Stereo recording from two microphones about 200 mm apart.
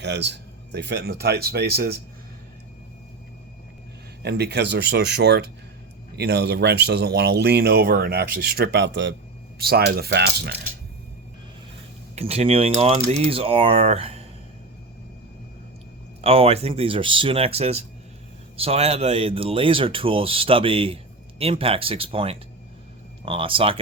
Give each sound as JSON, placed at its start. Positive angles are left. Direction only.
{"t": 0.0, "sound": "speech", "side_deg": -60}
{"t": 4.2, "sound": "speech", "side_deg": -55}
{"t": 9.6, "sound": "speech", "side_deg": -50}
{"t": 12.1, "sound": "speech", "side_deg": -30}
{"t": 16.2, "sound": "speech", "side_deg": -30}